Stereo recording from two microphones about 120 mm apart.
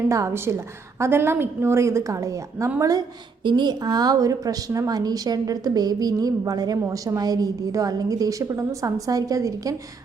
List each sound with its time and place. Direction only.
0.1 s a woman's voice: 25° right (ahead or behind)
3.4 s a woman's voice: 40° right (ahead or behind)